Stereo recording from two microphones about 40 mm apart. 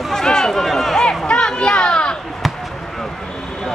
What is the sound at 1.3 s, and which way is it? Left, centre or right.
Children playing, left.